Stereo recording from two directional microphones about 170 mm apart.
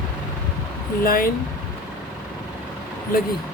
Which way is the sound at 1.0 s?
60° left (ahead or behind).